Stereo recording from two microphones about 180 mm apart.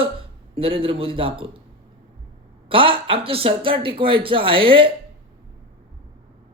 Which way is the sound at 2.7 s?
30° right (ahead or behind).